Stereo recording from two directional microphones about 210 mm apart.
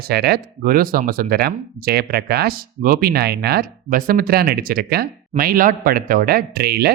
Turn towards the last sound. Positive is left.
turn(degrees=-50)  # may be behind; listen again after turning